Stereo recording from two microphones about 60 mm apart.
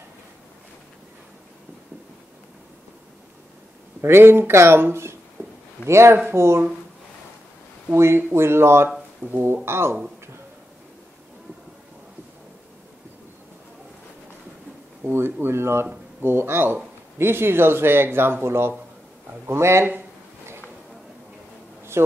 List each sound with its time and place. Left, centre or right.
4.0 s a man's voice: right
5.4 s a sound: right
5.9 s speech: right
7.9 s speech: right
15.4 s a man's voice: right
22.0 s speech: right